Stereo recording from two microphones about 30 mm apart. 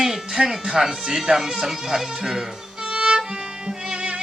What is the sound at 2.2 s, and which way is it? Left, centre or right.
Music, centre.